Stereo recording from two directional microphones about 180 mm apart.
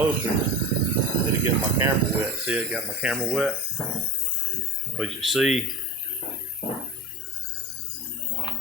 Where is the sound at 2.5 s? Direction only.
5° right (ahead or behind).